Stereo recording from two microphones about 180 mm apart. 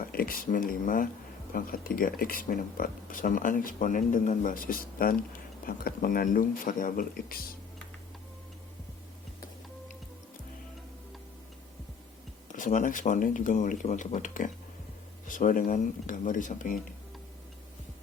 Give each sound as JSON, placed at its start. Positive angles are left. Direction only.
{"t": 0.0, "sound": "speech", "side_deg": 55}
{"t": 12.5, "sound": "speech", "side_deg": 45}